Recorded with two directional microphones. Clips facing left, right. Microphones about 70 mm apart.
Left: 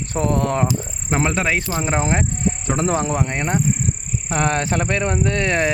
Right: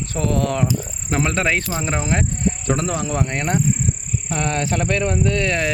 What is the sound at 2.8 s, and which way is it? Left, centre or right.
Speech, left.